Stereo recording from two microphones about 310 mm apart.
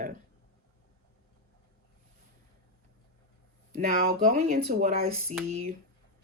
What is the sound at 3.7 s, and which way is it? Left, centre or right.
Speech, right.